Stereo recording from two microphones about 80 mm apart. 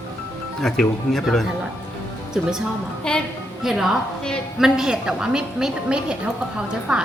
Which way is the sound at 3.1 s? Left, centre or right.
Centre.